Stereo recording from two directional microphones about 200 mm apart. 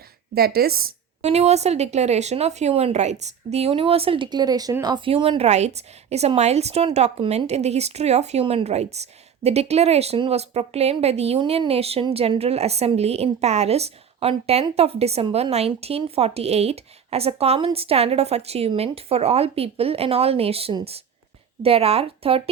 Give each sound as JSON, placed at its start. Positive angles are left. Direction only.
{"t": 0.3, "sound": "a woman's voice", "side_deg": -50}
{"t": 1.2, "sound": "a woman's voice", "side_deg": -35}